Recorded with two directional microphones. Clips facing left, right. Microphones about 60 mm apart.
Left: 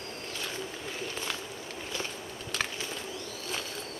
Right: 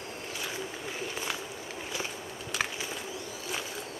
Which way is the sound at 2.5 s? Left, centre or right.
Centre.